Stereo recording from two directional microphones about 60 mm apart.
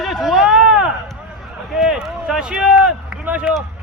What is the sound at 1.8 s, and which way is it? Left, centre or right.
Speech, centre.